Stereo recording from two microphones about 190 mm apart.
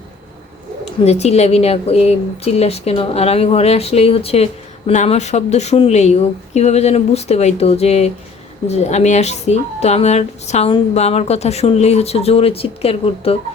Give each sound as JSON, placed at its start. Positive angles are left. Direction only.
{"t": 1.0, "sound": "a woman's voice", "side_deg": 35}